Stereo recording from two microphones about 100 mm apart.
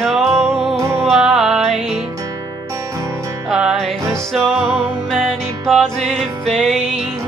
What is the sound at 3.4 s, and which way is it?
Music, 5° right (ahead or behind).